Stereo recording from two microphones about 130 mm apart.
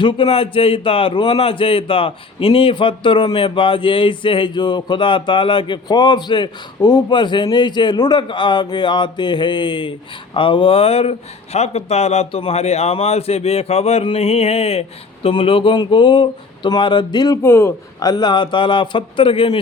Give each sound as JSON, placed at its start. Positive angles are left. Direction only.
{"t": 0.0, "sound": "a man's voice", "side_deg": 40}
{"t": 18.1, "sound": "a man's voice", "side_deg": 35}